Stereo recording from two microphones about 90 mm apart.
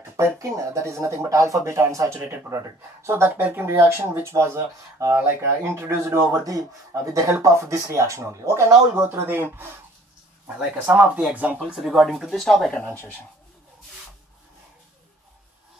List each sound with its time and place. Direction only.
0.2 s speech: 35° right (ahead or behind)
10.5 s speech: 15° right (ahead or behind)
11.7 s speech: 5° right (ahead or behind)